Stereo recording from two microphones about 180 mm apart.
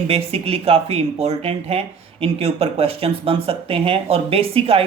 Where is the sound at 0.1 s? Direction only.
35° right (ahead or behind).